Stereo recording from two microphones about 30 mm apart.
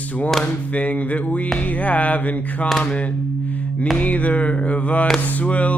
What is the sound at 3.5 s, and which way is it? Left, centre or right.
Music, left.